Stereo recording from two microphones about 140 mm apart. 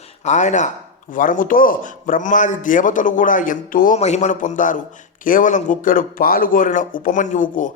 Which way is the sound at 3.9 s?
55° left (ahead or behind).